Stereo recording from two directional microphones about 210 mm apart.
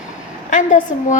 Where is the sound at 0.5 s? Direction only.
35° left (ahead or behind).